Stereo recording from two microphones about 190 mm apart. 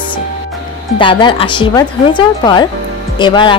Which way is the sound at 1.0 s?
25° left (ahead or behind).